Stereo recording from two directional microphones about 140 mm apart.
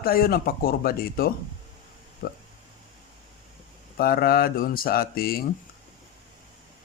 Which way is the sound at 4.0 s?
90° left.